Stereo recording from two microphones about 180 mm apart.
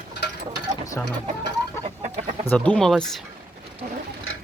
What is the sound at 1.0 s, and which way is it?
Speech, 15° left (ahead or behind).